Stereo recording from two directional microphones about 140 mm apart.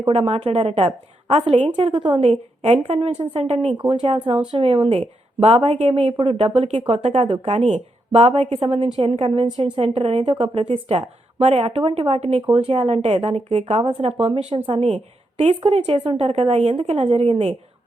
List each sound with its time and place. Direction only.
0.1 s speech: 40° right (ahead or behind)
3.7 s speech: 35° right (ahead or behind)
14.2 s speech: 40° right (ahead or behind)